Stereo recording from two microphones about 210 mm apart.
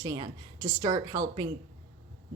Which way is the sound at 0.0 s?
20° right (ahead or behind).